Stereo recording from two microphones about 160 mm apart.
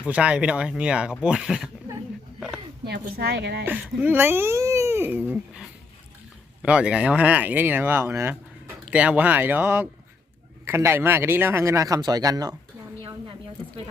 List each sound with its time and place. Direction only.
0.0 s speech: 5° right (ahead or behind)
2.8 s a woman's voice: 90° right
3.7 s speech: 10° right (ahead or behind)